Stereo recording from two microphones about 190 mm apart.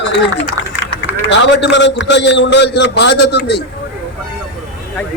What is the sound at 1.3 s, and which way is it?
A man's voice, 70° left (ahead or behind).